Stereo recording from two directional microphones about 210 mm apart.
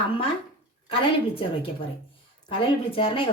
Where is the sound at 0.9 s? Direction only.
25° left (ahead or behind).